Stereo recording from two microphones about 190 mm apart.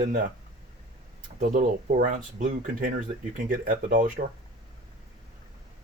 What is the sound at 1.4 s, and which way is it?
Speech, 45° right (ahead or behind).